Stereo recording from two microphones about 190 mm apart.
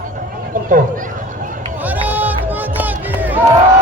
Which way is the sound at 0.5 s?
45° right (ahead or behind).